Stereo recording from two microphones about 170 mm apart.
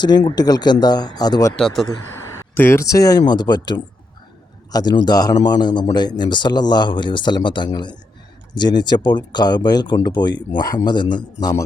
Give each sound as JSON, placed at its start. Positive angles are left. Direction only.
{"t": 0.0, "sound": "a man's voice", "side_deg": 25}
{"t": 1.5, "sound": "speech", "side_deg": 0}
{"t": 2.6, "sound": "a man's voice", "side_deg": 15}